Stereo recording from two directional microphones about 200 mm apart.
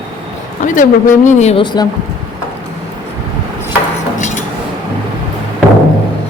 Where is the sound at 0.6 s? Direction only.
40° left (ahead or behind).